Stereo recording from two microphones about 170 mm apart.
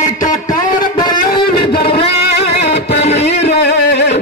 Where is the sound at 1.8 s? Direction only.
35° left (ahead or behind).